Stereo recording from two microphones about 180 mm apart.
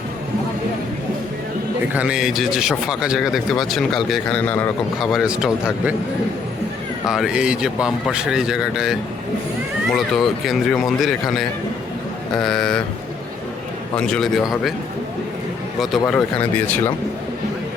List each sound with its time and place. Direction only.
1.9 s speech: 5° right (ahead or behind); by 4.7 s 10° left (ahead or behind)
4.9 s speech: centre (ahead or behind)
7.0 s speech: 5° right (ahead or behind)
13.9 s speech: 5° left (ahead or behind)
15.8 s speech: centre (ahead or behind)